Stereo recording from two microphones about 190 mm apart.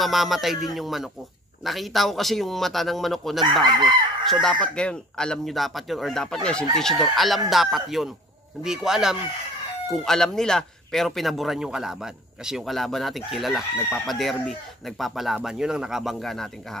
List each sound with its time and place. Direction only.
0.0 s speech: centre (ahead or behind)
3.6 s chicken: 25° right (ahead or behind)
4.3 s speech: centre (ahead or behind)